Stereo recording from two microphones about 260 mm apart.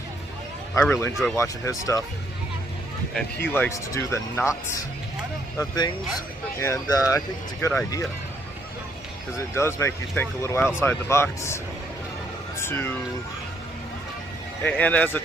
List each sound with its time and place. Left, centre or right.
0.8 s speech: centre
3.4 s speech: centre
9.6 s speech: centre
12.5 s a sound: centre
14.6 s speech: centre